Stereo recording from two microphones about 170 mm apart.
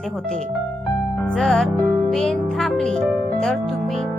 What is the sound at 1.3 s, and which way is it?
Speech, 5° left (ahead or behind).